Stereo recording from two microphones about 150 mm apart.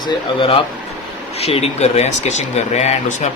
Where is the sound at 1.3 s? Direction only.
45° left (ahead or behind).